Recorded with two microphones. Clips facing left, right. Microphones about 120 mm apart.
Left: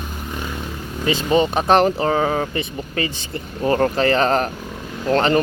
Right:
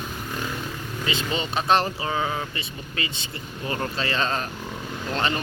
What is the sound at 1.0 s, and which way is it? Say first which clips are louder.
Speech: left 11 dB; 45° left (ahead or behind).